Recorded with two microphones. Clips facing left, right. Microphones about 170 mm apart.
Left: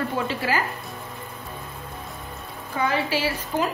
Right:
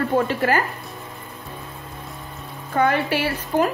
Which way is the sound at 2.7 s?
60° right (ahead or behind).